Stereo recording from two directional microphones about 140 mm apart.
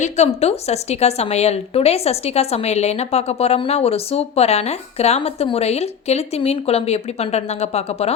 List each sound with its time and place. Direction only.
0.0 s a woman's voice: 50° left (ahead or behind)